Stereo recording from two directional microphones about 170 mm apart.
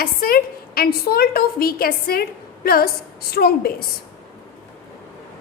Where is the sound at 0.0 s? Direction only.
60° left (ahead or behind).